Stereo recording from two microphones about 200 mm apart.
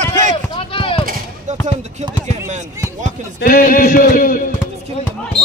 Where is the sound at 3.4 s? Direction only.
45° left (ahead or behind).